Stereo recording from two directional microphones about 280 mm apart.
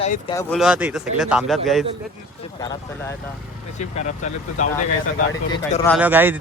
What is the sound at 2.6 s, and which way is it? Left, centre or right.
Speech, centre.